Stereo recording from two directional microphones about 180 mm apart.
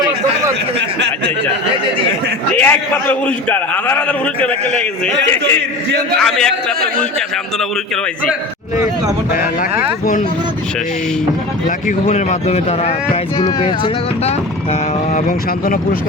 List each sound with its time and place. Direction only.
0.8 s speech: 75° right (ahead or behind)
2.6 s a man's voice: 10° left (ahead or behind)
11.9 s speech: 40° left (ahead or behind)
15.6 s speech: 55° left (ahead or behind)